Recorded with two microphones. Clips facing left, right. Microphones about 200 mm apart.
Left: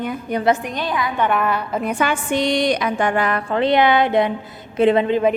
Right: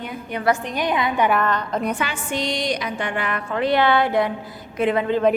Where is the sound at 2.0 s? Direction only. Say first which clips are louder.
Left 6 dB; 55° left (ahead or behind); by 5.2 s 25° left (ahead or behind).